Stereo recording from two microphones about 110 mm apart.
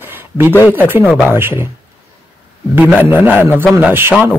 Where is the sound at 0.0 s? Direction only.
20° right (ahead or behind).